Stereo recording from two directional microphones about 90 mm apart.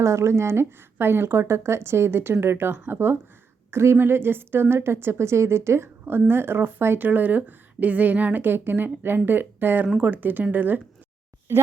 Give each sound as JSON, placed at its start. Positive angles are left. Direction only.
{"t": 0.0, "sound": "a woman's voice", "side_deg": -30}